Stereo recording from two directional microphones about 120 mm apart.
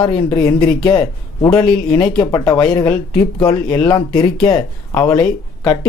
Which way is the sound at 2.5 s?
40° left (ahead or behind).